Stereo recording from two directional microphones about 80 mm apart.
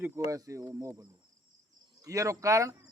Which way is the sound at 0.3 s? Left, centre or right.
Right.